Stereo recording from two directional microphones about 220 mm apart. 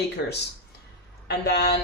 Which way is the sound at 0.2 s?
50° left (ahead or behind).